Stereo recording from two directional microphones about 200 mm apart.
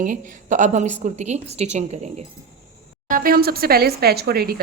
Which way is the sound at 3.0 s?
45° right (ahead or behind).